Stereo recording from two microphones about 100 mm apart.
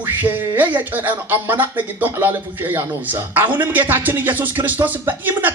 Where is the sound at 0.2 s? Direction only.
20° right (ahead or behind).